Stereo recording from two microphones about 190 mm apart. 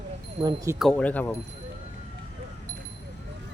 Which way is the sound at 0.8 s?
5° left (ahead or behind).